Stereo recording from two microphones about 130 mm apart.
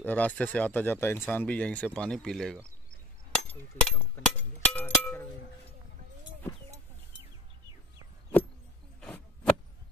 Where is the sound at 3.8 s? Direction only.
15° left (ahead or behind).